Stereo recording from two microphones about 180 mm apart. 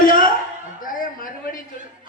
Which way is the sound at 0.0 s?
50° left (ahead or behind).